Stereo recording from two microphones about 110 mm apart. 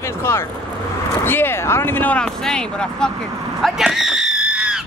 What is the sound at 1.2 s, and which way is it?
Speech, 20° left (ahead or behind).